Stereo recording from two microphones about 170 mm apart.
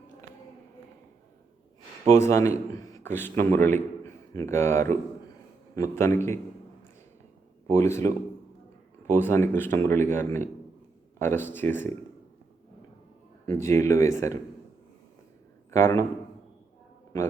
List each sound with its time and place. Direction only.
2.1 s a man's voice: 15° left (ahead or behind)
7.7 s speech: 15° left (ahead or behind)
13.5 s speech: 15° left (ahead or behind)
15.7 s speech: 15° left (ahead or behind)